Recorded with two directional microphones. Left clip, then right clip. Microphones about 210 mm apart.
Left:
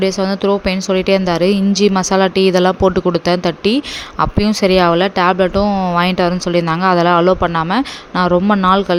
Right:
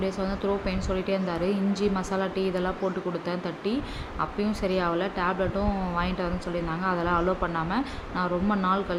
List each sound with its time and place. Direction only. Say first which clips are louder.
0.0 s speech: left 13 dB; 45° left (ahead or behind)